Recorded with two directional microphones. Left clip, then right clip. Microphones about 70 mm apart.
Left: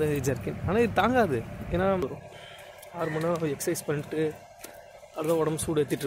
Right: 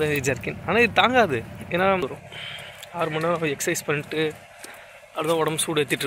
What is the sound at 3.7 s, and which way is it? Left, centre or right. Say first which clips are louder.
Speech: right 5 dB; centre.